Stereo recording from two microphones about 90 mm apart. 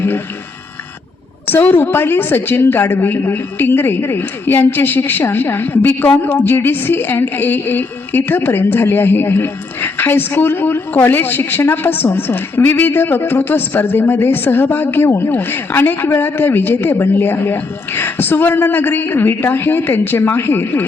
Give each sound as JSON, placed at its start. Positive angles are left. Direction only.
{"t": 1.5, "sound": "speech", "side_deg": 20}